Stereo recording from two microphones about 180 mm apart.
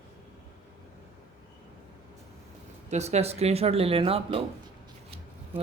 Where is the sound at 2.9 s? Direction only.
40° right (ahead or behind).